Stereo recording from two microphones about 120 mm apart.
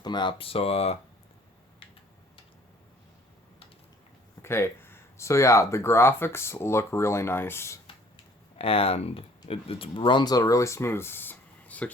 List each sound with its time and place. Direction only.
0.0 s speech: 40° left (ahead or behind); by 0.9 s 60° left (ahead or behind)
4.4 s speech: 20° left (ahead or behind)
7.9 s typing: 50° left (ahead or behind)
9.5 s speech: 50° left (ahead or behind); by 11.9 s 10° left (ahead or behind)